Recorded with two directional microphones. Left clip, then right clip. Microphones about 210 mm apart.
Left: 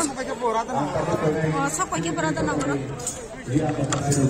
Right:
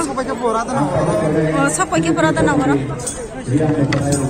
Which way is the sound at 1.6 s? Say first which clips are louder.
Right 9 dB; centre (ahead or behind).